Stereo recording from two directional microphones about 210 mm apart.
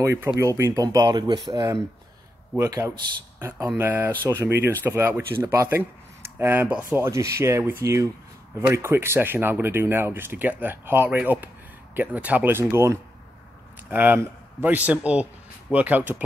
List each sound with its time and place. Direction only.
0.0 s speech: 10° right (ahead or behind)